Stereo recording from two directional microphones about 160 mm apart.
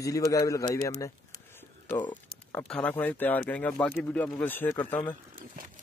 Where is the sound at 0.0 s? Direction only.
20° left (ahead or behind).